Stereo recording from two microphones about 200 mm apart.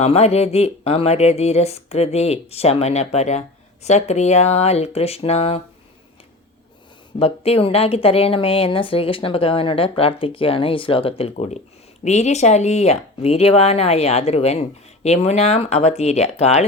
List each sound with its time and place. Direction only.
0.0 s speech: 30° left (ahead or behind)
7.2 s speech: 30° left (ahead or behind)